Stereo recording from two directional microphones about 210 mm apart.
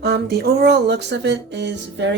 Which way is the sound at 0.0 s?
50° right (ahead or behind).